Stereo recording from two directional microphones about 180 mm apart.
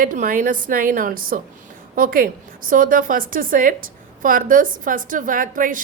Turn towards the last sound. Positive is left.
turn(degrees=-50)  # may be behind; listen again after turning